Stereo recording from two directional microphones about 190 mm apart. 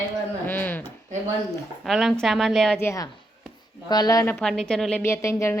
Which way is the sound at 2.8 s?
15° left (ahead or behind).